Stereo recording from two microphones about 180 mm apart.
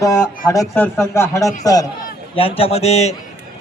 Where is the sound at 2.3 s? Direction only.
30° left (ahead or behind).